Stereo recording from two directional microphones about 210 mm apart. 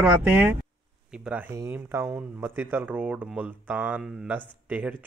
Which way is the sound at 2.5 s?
10° right (ahead or behind).